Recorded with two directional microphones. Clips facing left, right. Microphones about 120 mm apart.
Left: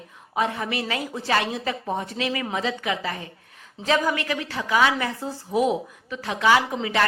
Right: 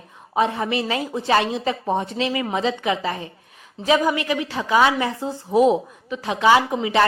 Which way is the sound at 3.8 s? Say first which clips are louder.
Right 4 dB; 15° right (ahead or behind).